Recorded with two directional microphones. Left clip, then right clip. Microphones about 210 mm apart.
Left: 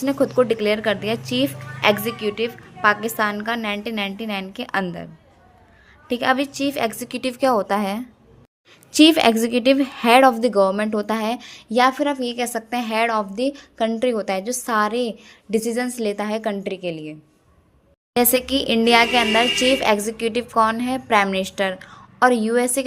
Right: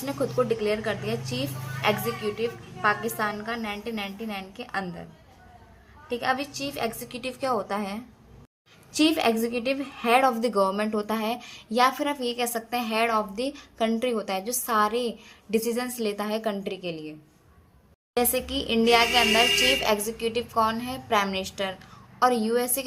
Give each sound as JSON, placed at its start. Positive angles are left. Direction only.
{"t": 0.0, "sound": "a woman's voice", "side_deg": 40}
{"t": 6.1, "sound": "a woman's voice", "side_deg": 45}